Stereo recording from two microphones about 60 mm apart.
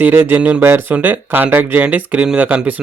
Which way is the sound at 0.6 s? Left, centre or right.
Right.